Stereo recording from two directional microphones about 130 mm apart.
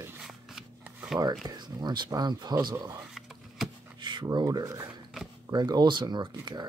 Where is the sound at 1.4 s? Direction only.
35° right (ahead or behind).